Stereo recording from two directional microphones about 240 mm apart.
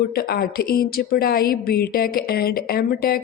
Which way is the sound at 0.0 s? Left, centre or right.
Left.